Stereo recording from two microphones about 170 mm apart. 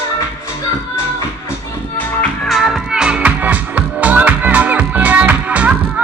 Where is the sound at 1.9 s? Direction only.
5° left (ahead or behind).